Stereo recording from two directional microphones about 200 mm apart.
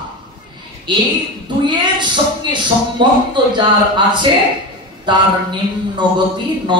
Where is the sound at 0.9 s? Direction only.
20° right (ahead or behind).